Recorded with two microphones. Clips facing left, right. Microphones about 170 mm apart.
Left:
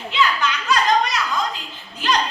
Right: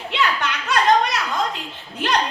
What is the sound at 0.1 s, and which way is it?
Children playing, 65° right (ahead or behind).